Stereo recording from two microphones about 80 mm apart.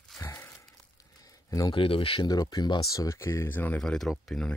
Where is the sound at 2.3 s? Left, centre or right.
Left.